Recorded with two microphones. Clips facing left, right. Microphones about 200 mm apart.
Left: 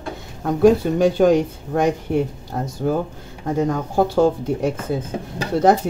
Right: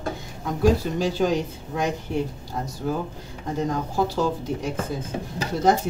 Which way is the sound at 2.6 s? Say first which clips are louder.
Left 5 dB; 55° left (ahead or behind).